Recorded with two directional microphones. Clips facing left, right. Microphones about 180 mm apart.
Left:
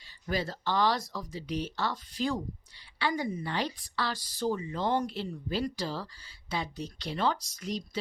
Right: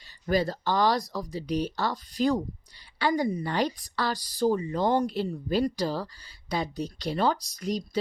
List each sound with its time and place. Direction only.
0.3 s speech: 40° right (ahead or behind)